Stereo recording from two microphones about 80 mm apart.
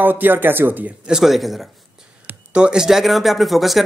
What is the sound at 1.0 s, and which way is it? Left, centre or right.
Speech, centre.